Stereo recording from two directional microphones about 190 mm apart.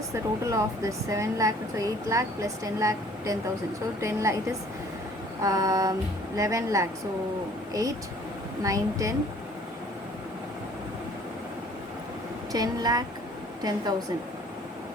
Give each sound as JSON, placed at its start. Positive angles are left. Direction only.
{"t": 0.1, "sound": "speech", "side_deg": -15}
{"t": 5.4, "sound": "speech", "side_deg": -15}
{"t": 12.5, "sound": "a woman's voice", "side_deg": -20}